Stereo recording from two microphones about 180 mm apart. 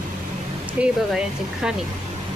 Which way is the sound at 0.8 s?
5° right (ahead or behind).